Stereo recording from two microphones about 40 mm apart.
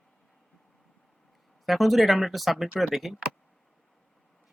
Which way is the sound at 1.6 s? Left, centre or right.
Centre.